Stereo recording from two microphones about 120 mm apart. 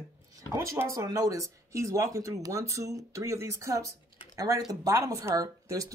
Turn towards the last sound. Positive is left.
turn(degrees=-30)  # may be behind; listen again after turning